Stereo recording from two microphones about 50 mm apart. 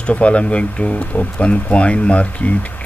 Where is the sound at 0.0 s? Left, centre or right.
Left.